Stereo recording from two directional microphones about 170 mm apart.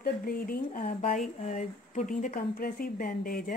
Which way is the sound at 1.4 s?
45° left (ahead or behind).